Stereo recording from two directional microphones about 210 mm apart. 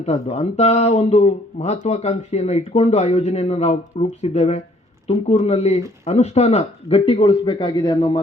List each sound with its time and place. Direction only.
0.0 s speech: 30° left (ahead or behind)